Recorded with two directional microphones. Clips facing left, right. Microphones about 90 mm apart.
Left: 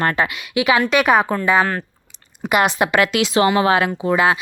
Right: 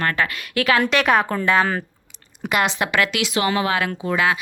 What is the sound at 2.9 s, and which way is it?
Speech, 30° left (ahead or behind).